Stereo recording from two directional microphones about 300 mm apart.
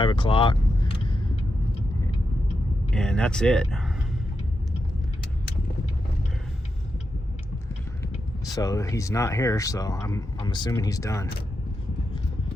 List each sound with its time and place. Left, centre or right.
0.0 s vehicle: centre
2.9 s speech: centre
8.1 s speech: centre